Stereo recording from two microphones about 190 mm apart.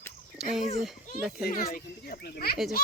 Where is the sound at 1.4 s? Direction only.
50° left (ahead or behind).